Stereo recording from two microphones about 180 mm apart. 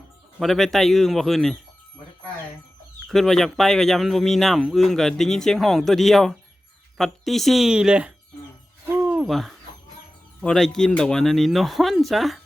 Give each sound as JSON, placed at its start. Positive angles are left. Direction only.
{"t": 0.3, "sound": "speech", "side_deg": 0}
{"t": 3.1, "sound": "speech", "side_deg": 0}
{"t": 9.0, "sound": "hoot", "side_deg": -5}
{"t": 10.4, "sound": "speech", "side_deg": 5}